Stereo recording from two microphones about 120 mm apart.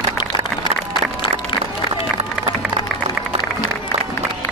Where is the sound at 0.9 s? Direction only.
40° left (ahead or behind).